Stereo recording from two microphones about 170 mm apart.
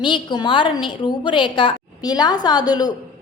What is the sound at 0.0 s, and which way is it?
A woman's voice, 25° left (ahead or behind).